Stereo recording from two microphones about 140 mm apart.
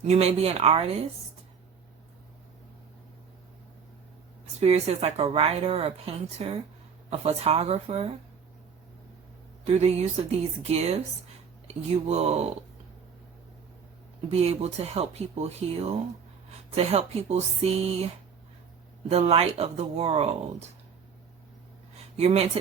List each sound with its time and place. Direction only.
0.0 s a woman's voice: 50° right (ahead or behind)
4.6 s a woman's voice: 50° right (ahead or behind)
9.6 s a woman's voice: 50° right (ahead or behind)
14.3 s a woman's voice: 50° right (ahead or behind)
22.2 s a woman's voice: 50° right (ahead or behind)